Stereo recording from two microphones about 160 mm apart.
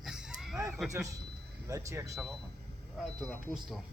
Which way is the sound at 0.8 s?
20° right (ahead or behind).